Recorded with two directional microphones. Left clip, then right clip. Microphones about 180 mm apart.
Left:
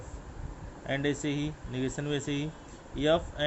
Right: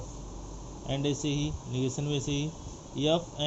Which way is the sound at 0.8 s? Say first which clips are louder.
Left 1 dB; 35° left (ahead or behind).